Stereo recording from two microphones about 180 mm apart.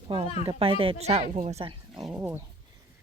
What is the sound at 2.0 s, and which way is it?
Speech, 10° right (ahead or behind).